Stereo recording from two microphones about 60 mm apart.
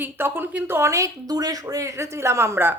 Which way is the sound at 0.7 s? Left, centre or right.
Right.